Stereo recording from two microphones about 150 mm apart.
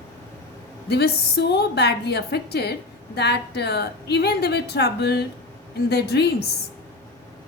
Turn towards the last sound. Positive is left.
turn(degrees=90)